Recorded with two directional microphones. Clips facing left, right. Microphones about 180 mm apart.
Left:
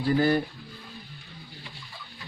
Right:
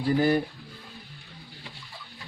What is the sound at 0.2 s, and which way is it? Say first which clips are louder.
Speech: even; 15° right (ahead or behind).